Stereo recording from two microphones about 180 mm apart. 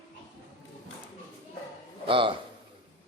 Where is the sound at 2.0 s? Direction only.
30° right (ahead or behind).